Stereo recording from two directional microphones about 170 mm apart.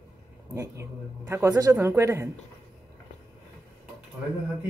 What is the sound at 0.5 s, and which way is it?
Speech, 20° right (ahead or behind).